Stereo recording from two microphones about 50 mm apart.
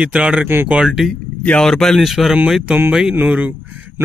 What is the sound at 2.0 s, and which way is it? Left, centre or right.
Speech, centre.